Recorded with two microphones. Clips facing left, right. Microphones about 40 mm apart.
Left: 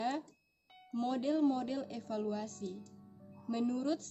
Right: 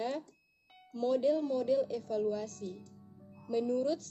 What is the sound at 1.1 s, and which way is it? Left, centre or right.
A woman's voice, centre.